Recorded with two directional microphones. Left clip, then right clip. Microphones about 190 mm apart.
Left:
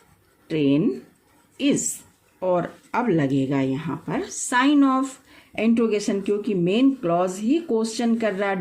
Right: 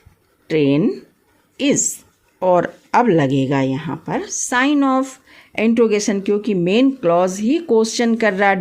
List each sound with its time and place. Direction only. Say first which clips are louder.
0.4 s speech: right 5 dB; 45° right (ahead or behind)